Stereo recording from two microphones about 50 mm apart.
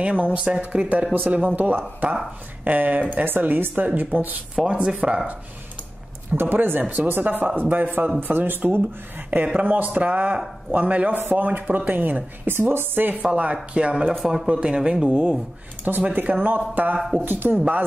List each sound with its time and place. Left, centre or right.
0.0 s speech: right
3.3 s speech: right
4.7 s speech: right
6.3 s speech: right; by 14.1 s centre
14.2 s speech: centre
15.9 s speech: right